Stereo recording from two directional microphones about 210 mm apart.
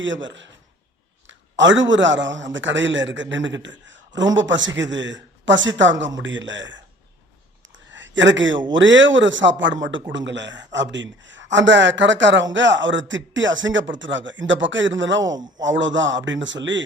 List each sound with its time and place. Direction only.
0.0 s a man's voice: 60° right (ahead or behind)
7.7 s a sound: 60° right (ahead or behind)
8.7 s a man's voice: 60° right (ahead or behind)